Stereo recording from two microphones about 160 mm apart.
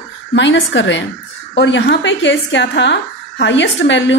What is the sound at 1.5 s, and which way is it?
A woman's voice, 90° left.